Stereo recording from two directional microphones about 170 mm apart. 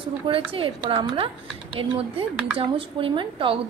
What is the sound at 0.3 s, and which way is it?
Speech, 30° right (ahead or behind).